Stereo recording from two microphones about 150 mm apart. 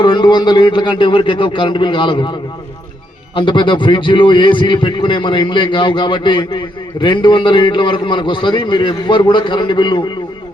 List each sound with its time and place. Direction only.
0.0 s a man's voice: 30° left (ahead or behind)
3.3 s a man's voice: 30° left (ahead or behind)